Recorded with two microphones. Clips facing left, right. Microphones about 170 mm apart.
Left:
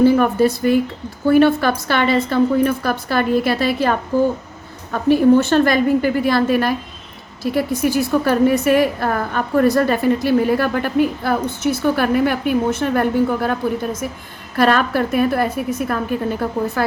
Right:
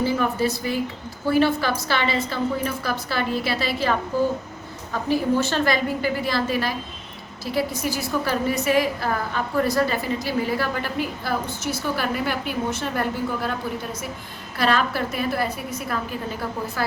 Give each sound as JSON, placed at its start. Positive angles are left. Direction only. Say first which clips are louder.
{"t": 0.0, "sound": "a woman's voice", "louder": "left 9 dB", "side_deg": 55}